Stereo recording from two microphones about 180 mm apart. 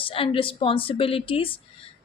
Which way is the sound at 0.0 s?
30° left (ahead or behind).